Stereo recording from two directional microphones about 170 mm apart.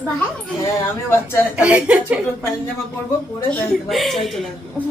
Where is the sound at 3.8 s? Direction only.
Centre (ahead or behind).